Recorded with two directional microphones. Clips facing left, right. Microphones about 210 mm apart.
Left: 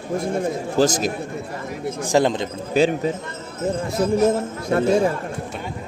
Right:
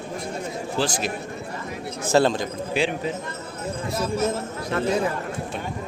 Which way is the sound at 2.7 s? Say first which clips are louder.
Left 7 dB; 40° left (ahead or behind).